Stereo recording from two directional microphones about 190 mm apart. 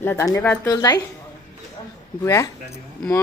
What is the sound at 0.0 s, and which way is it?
Speech, 15° left (ahead or behind).